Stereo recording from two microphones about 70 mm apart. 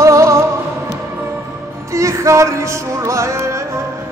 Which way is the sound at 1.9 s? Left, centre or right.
Right.